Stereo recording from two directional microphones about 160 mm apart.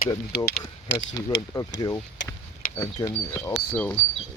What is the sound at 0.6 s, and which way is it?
Speech, 25° left (ahead or behind).